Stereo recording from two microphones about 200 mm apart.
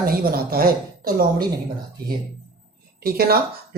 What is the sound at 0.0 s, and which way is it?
Speech, 50° right (ahead or behind).